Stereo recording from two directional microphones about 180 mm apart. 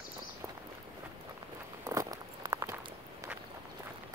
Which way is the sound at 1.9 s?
20° right (ahead or behind).